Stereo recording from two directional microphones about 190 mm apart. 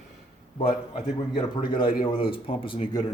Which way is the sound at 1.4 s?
25° left (ahead or behind).